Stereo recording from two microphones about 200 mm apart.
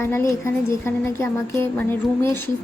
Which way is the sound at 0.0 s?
15° left (ahead or behind).